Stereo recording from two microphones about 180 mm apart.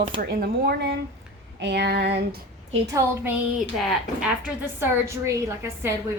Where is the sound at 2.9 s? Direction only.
10° right (ahead or behind).